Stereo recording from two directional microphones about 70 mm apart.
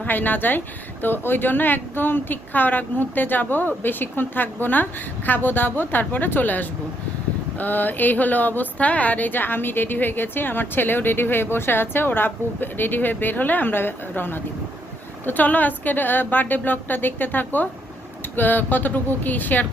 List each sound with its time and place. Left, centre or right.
0.0 s speech: left